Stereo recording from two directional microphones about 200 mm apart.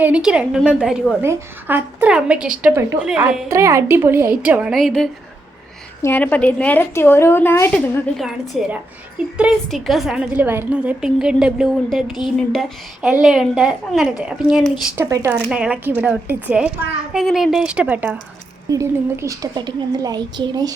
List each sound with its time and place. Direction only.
0.0 s a woman's voice: 5° right (ahead or behind); by 8.0 s 10° left (ahead or behind)
8.1 s a woman's voice: centre (ahead or behind); by 20.7 s 20° right (ahead or behind)